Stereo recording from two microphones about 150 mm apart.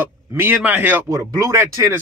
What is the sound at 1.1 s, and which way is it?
Speech, 20° right (ahead or behind).